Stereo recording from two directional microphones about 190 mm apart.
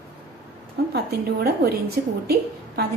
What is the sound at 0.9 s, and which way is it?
A woman's voice, 55° right (ahead or behind).